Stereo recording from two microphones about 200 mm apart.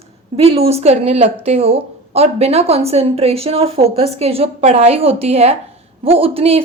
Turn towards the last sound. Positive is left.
turn(degrees=-30)  # may be behind; listen again after turning